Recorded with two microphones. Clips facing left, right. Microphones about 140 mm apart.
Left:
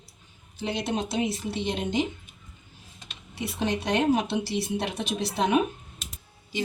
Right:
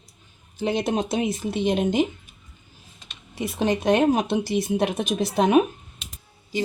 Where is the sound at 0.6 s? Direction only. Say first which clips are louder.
Right 5 dB; 50° right (ahead or behind).